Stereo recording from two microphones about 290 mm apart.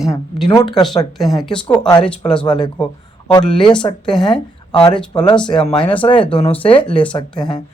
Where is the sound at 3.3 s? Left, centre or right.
Centre.